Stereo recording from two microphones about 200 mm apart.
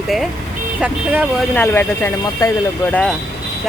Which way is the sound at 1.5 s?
10° left (ahead or behind).